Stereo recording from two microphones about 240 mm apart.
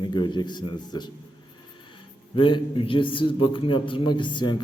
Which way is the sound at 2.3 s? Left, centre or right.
Left.